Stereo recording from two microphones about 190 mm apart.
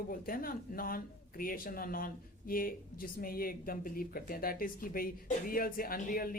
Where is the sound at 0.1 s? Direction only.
50° left (ahead or behind).